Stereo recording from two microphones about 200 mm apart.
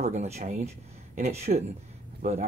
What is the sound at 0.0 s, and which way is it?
Speech, 35° right (ahead or behind).